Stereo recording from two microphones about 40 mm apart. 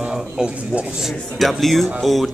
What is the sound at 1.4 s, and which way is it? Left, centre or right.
Speech, centre.